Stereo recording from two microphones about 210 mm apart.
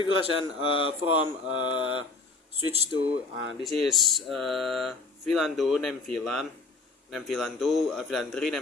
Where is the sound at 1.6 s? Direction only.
25° left (ahead or behind).